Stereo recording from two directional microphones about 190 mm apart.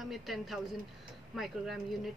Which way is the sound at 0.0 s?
Centre (ahead or behind).